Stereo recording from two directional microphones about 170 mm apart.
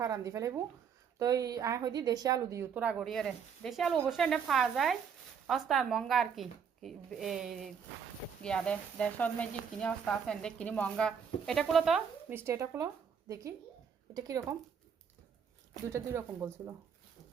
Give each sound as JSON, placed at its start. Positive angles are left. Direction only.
{"t": 0.0, "sound": "a woman's voice", "side_deg": -20}
{"t": 12.3, "sound": "speech", "side_deg": -15}
{"t": 15.9, "sound": "speech", "side_deg": -15}